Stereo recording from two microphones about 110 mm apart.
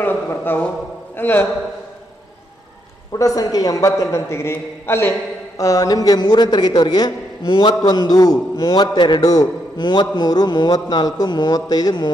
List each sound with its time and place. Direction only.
0.0 s a sound: 20° left (ahead or behind)
1.1 s a man's voice: 20° left (ahead or behind)
3.1 s a man's voice: 30° left (ahead or behind)
5.6 s a man's voice: 30° left (ahead or behind)